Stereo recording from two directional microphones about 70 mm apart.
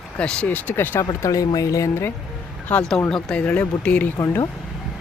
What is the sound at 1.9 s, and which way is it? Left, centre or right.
Speech, left.